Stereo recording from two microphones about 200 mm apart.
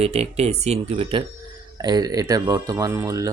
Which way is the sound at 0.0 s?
30° right (ahead or behind).